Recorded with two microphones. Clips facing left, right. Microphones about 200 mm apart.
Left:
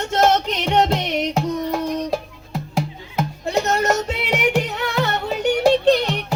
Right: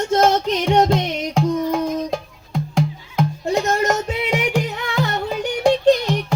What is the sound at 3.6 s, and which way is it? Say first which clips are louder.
Music: even; 65° left (ahead or behind).